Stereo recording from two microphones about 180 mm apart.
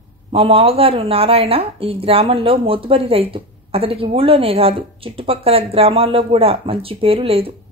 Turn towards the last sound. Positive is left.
turn(degrees=-30)  # may be behind; listen again after turning